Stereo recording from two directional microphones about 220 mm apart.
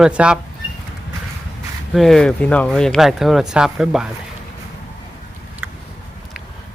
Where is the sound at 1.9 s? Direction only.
Centre (ahead or behind).